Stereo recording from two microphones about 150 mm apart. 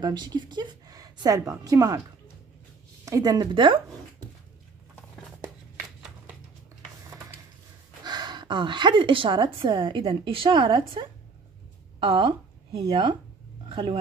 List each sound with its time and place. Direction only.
0.0 s a woman's voice: 30° right (ahead or behind)
3.1 s speech: 25° right (ahead or behind)
8.0 s a woman's voice: 30° right (ahead or behind)
13.7 s a sound: 35° right (ahead or behind)